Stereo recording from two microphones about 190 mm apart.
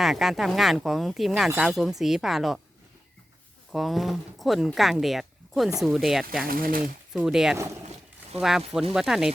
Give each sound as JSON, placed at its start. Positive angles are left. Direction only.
{"t": 0.0, "sound": "speech", "side_deg": 0}
{"t": 3.7, "sound": "speech", "side_deg": 0}
{"t": 6.5, "sound": "speech", "side_deg": -50}
{"t": 7.1, "sound": "speech", "side_deg": -5}
{"t": 7.5, "sound": "speech", "side_deg": -15}
{"t": 8.4, "sound": "speech", "side_deg": 0}